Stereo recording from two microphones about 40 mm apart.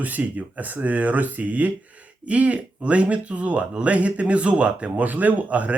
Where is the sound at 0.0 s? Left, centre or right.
Right.